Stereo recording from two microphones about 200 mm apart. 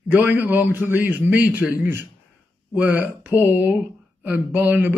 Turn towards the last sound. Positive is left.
turn(degrees=-10)  # may be behind; listen again after turning